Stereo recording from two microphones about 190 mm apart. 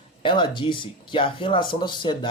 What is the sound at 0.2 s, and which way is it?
Speech, 25° left (ahead or behind).